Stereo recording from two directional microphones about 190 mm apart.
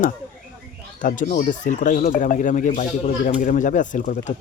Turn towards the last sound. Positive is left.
turn(degrees=40)  # may be behind; listen again after turning